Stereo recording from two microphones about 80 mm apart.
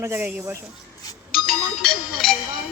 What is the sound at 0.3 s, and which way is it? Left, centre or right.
Speech, centre.